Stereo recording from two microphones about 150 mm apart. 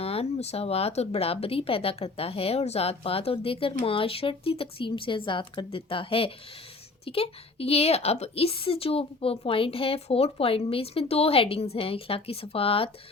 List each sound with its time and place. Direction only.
0.0 s speech: 40° left (ahead or behind)